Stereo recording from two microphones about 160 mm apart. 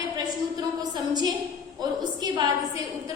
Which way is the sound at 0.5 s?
25° right (ahead or behind).